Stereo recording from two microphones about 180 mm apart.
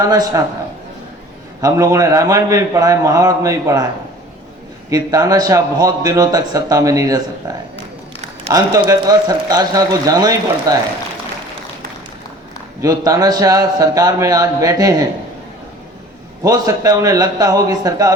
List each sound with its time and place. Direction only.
0.0 s speech: 20° right (ahead or behind)
1.6 s speech: 20° right (ahead or behind)
4.9 s speech: 20° right (ahead or behind)
12.8 s speech: 20° right (ahead or behind)
16.4 s speech: 20° right (ahead or behind)